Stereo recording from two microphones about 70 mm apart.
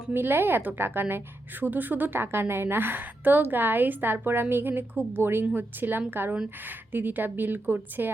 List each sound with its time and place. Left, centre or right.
0.1 s a woman's voice: right